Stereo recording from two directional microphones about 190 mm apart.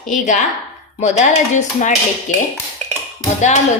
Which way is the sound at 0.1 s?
40° left (ahead or behind).